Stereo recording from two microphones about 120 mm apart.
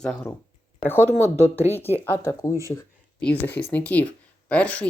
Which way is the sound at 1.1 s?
20° right (ahead or behind).